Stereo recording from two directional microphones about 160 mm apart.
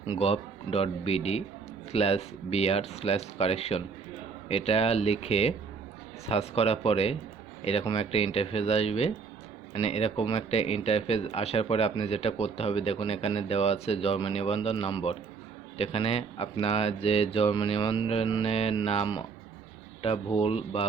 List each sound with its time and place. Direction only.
0.1 s speech: 40° left (ahead or behind)